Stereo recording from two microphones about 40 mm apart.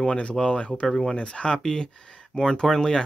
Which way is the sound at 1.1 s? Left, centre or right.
Left.